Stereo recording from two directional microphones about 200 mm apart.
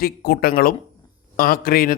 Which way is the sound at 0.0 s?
50° left (ahead or behind).